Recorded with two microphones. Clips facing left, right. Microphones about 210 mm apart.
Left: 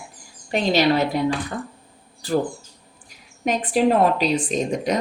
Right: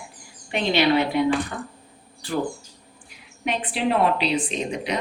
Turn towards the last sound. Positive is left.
turn(degrees=45)  # may be behind; listen again after turning